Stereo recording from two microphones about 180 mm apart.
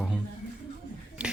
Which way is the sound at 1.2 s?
5° right (ahead or behind).